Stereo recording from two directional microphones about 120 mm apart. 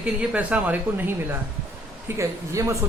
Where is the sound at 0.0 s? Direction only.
10° right (ahead or behind).